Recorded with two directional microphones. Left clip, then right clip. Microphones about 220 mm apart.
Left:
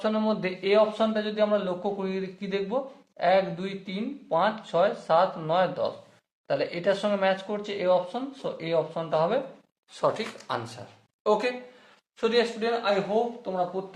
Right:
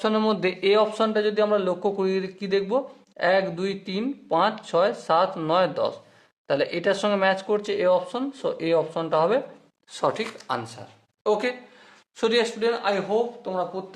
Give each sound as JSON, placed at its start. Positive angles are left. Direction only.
{"t": 0.0, "sound": "a man's voice", "side_deg": -40}
{"t": 9.9, "sound": "speech", "side_deg": -35}